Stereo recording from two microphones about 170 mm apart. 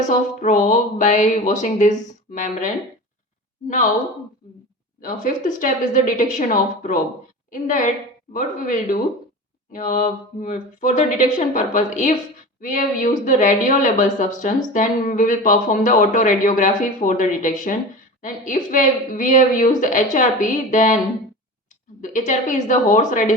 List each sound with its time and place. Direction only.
0.4 s speech: 45° left (ahead or behind)
4.9 s speech: 50° left (ahead or behind)
22.0 s speech: 45° left (ahead or behind)